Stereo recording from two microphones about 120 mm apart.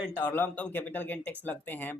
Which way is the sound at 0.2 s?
15° left (ahead or behind).